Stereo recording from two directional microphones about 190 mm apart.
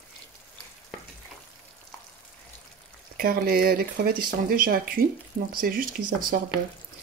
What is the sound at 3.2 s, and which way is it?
Speech, 50° right (ahead or behind).